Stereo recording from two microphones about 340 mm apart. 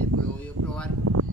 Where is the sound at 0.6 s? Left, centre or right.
Right.